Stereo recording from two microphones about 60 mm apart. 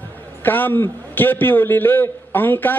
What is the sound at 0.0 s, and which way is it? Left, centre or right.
A man's voice, left.